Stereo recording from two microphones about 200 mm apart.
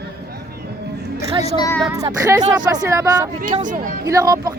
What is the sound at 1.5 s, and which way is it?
Speech, 20° left (ahead or behind).